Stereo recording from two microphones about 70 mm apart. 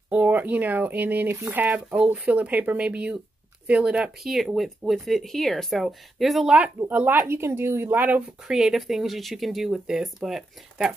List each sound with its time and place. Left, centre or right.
0.1 s speech: right; by 6.5 s centre
6.9 s speech: right
7.9 s speech: right
8.5 s speech: centre